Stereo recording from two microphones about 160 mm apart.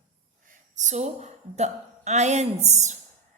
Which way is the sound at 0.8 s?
45° right (ahead or behind).